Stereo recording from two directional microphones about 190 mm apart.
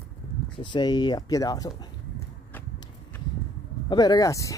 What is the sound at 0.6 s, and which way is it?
Speech, 25° left (ahead or behind).